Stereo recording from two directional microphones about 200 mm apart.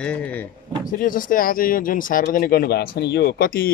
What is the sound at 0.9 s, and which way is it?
Speech, 45° left (ahead or behind).